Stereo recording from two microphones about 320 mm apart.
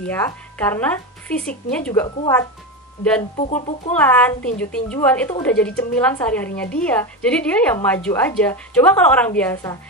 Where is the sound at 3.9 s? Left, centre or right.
Centre.